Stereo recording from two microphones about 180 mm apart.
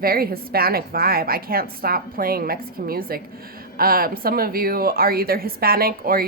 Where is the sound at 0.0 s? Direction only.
55° right (ahead or behind).